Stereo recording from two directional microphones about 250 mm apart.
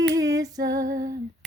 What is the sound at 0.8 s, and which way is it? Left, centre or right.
Female singing, right.